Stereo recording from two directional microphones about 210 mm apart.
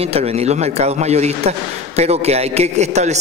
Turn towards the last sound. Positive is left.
turn(degrees=-30)  # may be behind; listen again after turning